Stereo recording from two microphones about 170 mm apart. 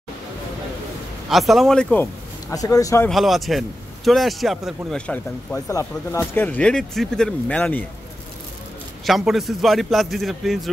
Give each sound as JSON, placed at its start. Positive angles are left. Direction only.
{"t": 1.3, "sound": "a man's voice", "side_deg": 0}
{"t": 2.5, "sound": "speech", "side_deg": 20}
{"t": 3.1, "sound": "a man's voice", "side_deg": 0}
{"t": 9.0, "sound": "a man's voice", "side_deg": 0}